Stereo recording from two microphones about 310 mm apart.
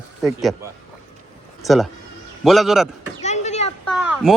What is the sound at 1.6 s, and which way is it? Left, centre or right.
Speech, centre.